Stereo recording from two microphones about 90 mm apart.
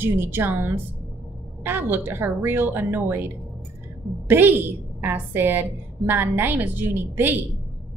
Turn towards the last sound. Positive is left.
turn(degrees=-20)  # may be behind; listen again after turning